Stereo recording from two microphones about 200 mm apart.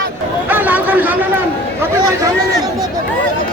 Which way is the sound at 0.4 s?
10° right (ahead or behind).